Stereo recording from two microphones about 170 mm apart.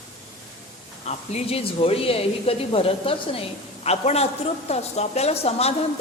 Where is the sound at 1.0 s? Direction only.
35° left (ahead or behind).